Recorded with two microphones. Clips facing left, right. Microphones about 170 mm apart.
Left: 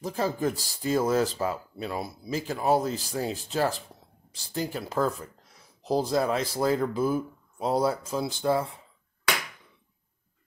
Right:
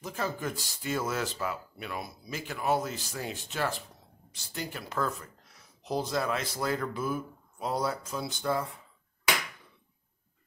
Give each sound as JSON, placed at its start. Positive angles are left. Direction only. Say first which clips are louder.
{"t": 0.0, "sound": "speech", "louder": "left 6 dB", "side_deg": 35}